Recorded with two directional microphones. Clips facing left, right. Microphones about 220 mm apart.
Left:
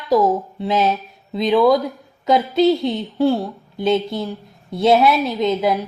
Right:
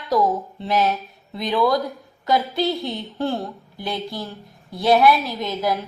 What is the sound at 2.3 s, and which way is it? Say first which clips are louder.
A woman's voice: left 6 dB; 20° left (ahead or behind).